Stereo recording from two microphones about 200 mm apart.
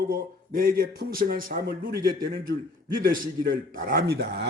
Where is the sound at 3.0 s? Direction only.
45° right (ahead or behind).